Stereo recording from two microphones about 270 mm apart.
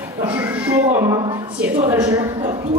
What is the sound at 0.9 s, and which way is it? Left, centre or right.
Speech, centre.